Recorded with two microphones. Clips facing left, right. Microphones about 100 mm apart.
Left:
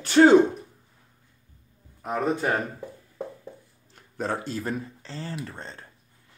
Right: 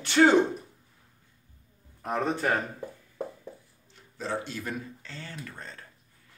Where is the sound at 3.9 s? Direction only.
50° left (ahead or behind); by 5.9 s 30° left (ahead or behind).